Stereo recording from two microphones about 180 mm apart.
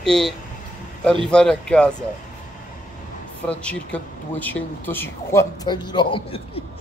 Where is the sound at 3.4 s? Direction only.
5° left (ahead or behind); by 6.6 s 30° left (ahead or behind).